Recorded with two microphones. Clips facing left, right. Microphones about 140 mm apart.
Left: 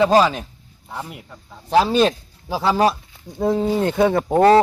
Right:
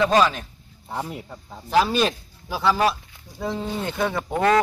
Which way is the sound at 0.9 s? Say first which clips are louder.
Right 2 dB; 15° right (ahead or behind).